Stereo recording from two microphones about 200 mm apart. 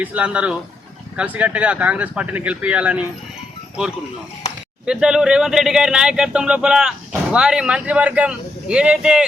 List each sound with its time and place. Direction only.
0.0 s speech: 5° right (ahead or behind)
4.9 s speech: 5° right (ahead or behind)